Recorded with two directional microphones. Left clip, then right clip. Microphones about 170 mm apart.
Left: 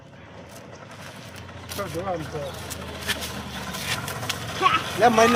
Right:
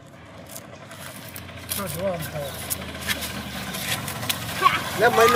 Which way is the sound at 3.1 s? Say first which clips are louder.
Right 1 dB; 20° left (ahead or behind).